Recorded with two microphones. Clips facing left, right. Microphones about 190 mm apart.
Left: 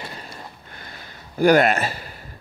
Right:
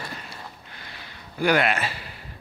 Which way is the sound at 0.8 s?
45° left (ahead or behind).